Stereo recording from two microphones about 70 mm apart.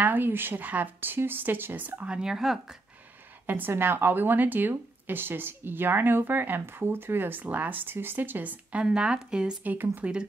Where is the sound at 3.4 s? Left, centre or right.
Right; by 9.5 s centre.